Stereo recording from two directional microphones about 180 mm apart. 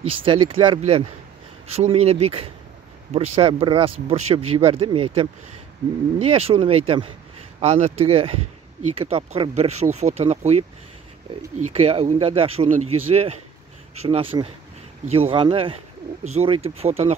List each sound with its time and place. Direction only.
0.0 s speech: 30° right (ahead or behind)
11.6 s speech: 35° right (ahead or behind)